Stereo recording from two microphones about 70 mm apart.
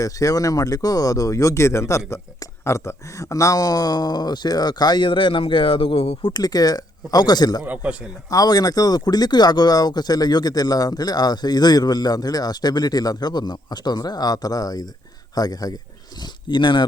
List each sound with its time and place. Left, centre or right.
0.0 s speech: left
6.3 s speech: left
7.6 s a man's voice: right
8.3 s speech: left
16.1 s speech: left